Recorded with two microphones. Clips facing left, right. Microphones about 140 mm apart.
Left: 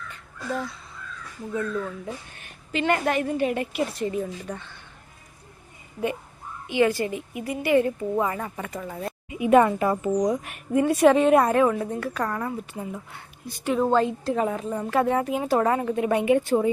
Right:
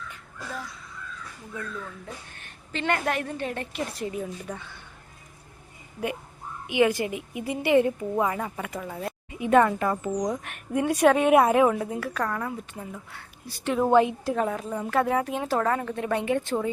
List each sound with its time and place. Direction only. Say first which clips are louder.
2.0 s a woman's voice: left 5 dB; 10° left (ahead or behind)
6.7 s a woman's voice: left 1 dB; 15° right (ahead or behind)
8.1 s a woman's voice: even; 5° right (ahead or behind)
9.3 s a woman's voice: left 2 dB; 10° left (ahead or behind)
11.3 s a woman's voice: even; 10° right (ahead or behind)
11.8 s a woman's voice: left 1 dB; centre (ahead or behind)
12.9 s speech: left 4 dB; 20° left (ahead or behind)
13.7 s a woman's voice: right 2 dB; 10° right (ahead or behind)
14.3 s a woman's voice: left 2 dB; centre (ahead or behind)